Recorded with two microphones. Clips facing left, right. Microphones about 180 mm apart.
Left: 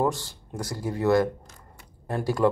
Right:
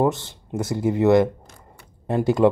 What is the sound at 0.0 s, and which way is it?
Speech, 20° right (ahead or behind).